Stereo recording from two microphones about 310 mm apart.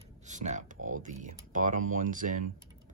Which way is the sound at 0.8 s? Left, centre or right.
Right.